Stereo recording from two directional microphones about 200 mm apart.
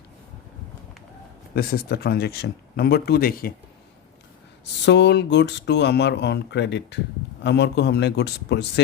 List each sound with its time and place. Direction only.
1.5 s speech: 50° left (ahead or behind)
4.9 s speech: 60° left (ahead or behind)